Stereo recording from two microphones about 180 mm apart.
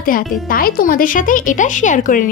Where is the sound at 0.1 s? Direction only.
50° left (ahead or behind).